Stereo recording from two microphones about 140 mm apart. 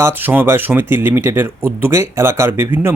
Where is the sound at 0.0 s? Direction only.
15° right (ahead or behind).